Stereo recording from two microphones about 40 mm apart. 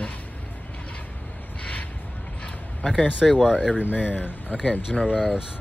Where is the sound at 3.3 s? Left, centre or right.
Left.